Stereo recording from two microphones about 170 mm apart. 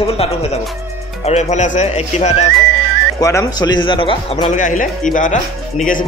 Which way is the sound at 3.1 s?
20° left (ahead or behind).